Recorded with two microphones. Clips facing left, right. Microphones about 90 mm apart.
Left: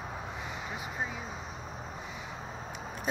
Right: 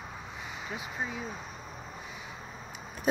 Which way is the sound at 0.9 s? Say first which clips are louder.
Right 1 dB; 10° left (ahead or behind).